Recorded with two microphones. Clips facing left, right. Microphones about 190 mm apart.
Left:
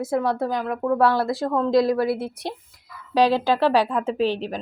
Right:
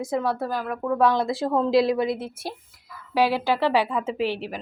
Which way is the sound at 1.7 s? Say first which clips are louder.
Left 2 dB; 25° right (ahead or behind).